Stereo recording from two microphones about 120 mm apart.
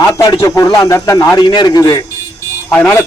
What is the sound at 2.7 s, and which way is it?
Speech, 20° left (ahead or behind).